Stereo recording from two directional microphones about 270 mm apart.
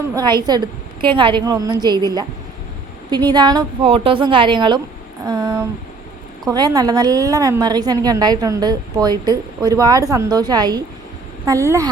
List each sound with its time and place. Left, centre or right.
0.1 s a woman's voice: centre
3.1 s a woman's voice: centre